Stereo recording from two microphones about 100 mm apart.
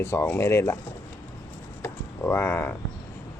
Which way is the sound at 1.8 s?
25° left (ahead or behind).